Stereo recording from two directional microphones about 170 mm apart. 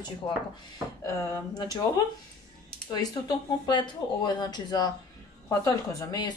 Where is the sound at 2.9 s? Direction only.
20° left (ahead or behind).